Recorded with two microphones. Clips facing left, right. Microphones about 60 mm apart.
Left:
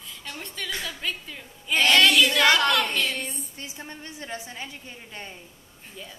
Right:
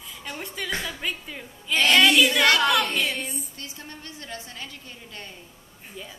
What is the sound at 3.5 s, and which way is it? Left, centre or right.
A woman's voice, centre.